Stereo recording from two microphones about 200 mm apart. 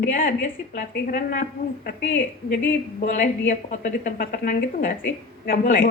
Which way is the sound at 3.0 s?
40° left (ahead or behind).